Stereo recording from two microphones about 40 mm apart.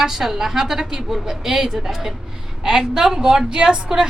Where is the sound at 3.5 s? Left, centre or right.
Right.